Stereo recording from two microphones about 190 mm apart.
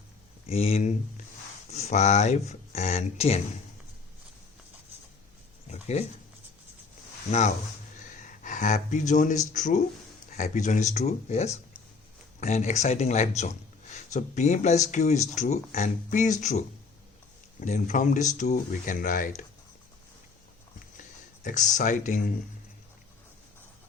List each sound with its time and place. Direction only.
0.4 s speech: 35° left (ahead or behind)
5.6 s a sound: 35° left (ahead or behind)
7.3 s a man's voice: 35° left (ahead or behind)
21.4 s speech: 40° left (ahead or behind)